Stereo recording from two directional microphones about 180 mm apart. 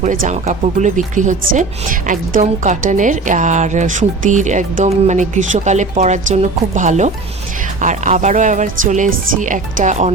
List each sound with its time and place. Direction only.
0.0 s speech: 45° right (ahead or behind)